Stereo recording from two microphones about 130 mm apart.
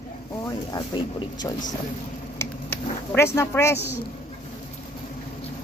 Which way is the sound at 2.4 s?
20° left (ahead or behind).